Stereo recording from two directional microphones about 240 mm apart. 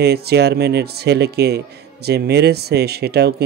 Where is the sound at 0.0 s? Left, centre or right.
Right.